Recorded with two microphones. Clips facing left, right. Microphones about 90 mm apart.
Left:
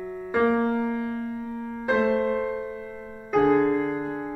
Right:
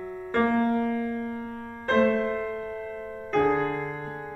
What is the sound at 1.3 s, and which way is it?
Music, 70° right (ahead or behind).